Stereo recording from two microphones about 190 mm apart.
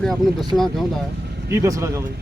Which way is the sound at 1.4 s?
15° right (ahead or behind).